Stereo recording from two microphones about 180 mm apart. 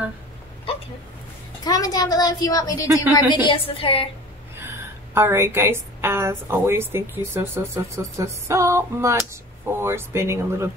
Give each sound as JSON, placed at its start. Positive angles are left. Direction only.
{"t": 1.6, "sound": "a woman's voice", "side_deg": 20}
{"t": 4.6, "sound": "a woman's voice", "side_deg": -15}